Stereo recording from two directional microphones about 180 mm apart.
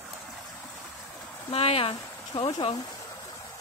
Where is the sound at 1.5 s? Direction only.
35° left (ahead or behind).